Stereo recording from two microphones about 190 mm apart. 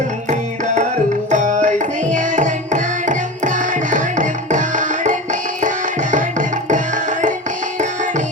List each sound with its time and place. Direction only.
0.3 s music: 40° right (ahead or behind)